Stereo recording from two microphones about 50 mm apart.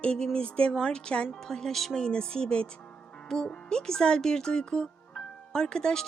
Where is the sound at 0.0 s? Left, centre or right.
Centre.